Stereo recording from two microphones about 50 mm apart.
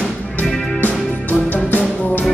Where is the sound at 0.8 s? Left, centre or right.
Left.